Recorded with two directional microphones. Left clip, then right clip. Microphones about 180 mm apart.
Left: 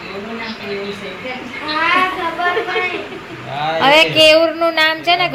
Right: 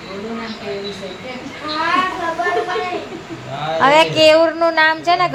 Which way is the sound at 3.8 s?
10° right (ahead or behind).